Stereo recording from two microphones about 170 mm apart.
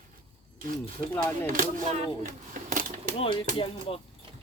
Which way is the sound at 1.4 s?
55° right (ahead or behind).